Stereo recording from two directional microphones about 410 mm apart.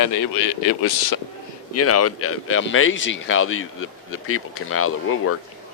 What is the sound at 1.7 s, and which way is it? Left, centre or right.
A man's voice, left.